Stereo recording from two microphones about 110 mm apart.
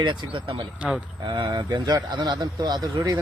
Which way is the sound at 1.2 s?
40° right (ahead or behind).